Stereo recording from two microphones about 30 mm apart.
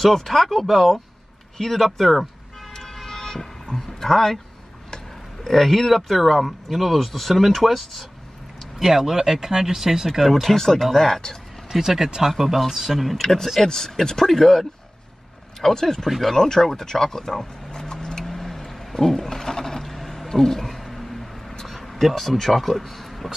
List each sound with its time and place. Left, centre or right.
0.0 s speech: centre
0.7 s speech: centre
2.7 s vehicle: centre
3.7 s speech: centre
8.7 s speech: centre
10.2 s speech: centre
10.5 s speech: centre
11.7 s speech: centre
13.2 s speech: centre
15.8 s speech: centre
17.6 s vehicle: left
18.2 s a sound: centre
22.2 s speech: centre